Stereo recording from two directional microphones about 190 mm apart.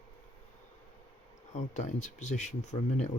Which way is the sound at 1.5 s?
40° left (ahead or behind).